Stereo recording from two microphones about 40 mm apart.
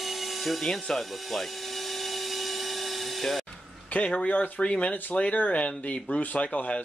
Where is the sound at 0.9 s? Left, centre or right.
Centre.